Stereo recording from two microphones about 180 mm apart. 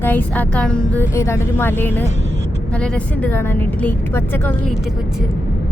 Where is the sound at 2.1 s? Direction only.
90° right.